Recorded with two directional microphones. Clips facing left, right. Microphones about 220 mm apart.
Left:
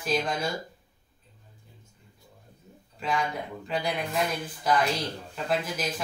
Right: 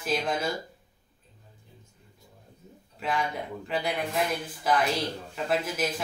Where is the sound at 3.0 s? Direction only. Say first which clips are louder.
Even; centre (ahead or behind).